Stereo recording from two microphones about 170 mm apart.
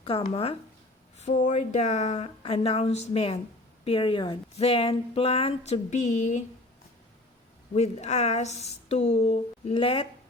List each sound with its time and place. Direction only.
0.0 s speech: 35° left (ahead or behind)
1.2 s speech: 50° left (ahead or behind)
7.7 s speech: 40° left (ahead or behind)